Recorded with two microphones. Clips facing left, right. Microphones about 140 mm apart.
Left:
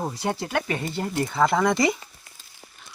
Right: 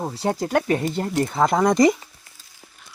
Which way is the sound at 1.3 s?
35° right (ahead or behind).